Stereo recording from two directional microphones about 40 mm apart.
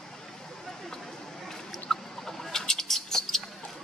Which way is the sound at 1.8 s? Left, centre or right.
Centre.